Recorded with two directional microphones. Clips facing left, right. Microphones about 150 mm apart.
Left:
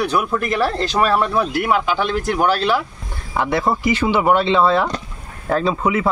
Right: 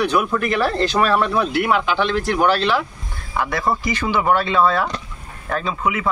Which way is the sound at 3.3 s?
25° left (ahead or behind).